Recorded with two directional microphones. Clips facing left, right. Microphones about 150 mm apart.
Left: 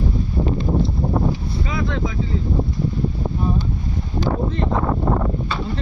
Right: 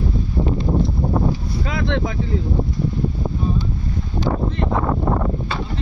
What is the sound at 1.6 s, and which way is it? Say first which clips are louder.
Vehicle: right 2 dB; 70° right (ahead or behind).